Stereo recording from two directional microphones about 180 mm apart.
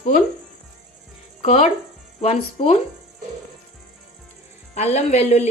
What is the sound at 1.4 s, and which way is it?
Speech, 35° left (ahead or behind).